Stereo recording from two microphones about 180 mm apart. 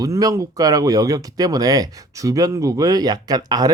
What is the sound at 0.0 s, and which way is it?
Speech, 20° right (ahead or behind).